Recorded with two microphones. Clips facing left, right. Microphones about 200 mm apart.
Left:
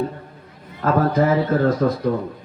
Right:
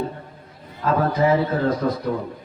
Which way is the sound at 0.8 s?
50° left (ahead or behind).